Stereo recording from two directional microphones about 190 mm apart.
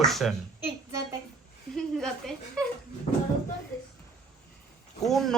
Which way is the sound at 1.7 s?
5° left (ahead or behind).